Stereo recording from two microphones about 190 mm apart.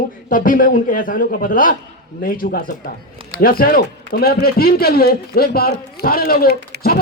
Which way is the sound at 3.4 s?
50° left (ahead or behind).